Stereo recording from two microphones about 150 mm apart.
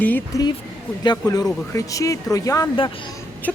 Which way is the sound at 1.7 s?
20° left (ahead or behind).